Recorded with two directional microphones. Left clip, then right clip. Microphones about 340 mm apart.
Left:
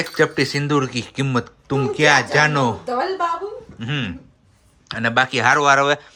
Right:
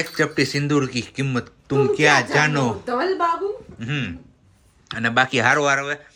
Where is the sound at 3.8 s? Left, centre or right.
Centre.